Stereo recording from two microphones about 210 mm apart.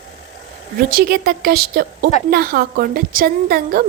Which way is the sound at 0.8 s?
45° right (ahead or behind).